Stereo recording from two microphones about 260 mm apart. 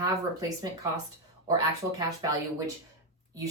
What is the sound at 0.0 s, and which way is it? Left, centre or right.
Speech, centre.